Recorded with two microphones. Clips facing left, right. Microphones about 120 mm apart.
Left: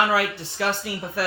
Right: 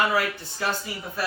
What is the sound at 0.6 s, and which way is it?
Music, 80° left.